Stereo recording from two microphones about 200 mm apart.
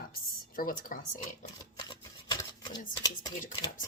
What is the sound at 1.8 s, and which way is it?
Shuffling cards, 20° left (ahead or behind).